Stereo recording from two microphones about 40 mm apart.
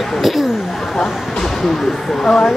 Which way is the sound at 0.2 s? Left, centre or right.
Centre.